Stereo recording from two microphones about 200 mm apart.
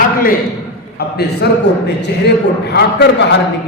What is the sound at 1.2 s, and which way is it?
A man's voice, 55° left (ahead or behind).